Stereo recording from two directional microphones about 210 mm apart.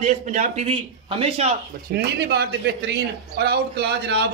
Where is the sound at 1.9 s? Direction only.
50° right (ahead or behind).